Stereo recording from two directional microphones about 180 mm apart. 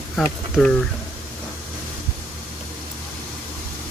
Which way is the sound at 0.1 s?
5° left (ahead or behind).